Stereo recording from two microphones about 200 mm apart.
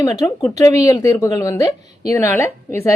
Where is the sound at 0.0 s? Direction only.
15° left (ahead or behind).